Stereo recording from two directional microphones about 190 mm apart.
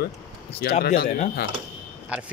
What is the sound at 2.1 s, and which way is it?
Speech, 5° right (ahead or behind).